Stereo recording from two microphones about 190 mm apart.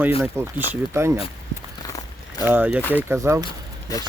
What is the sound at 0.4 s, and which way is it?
Speech, 15° right (ahead or behind).